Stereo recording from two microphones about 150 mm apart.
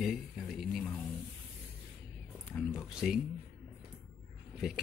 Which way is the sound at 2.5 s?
Centre (ahead or behind).